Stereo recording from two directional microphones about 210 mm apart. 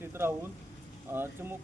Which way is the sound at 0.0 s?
10° right (ahead or behind).